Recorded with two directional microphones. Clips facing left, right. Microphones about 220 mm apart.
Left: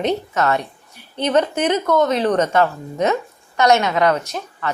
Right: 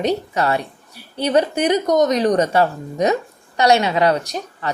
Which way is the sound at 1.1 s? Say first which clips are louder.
Right 1 dB; 10° right (ahead or behind).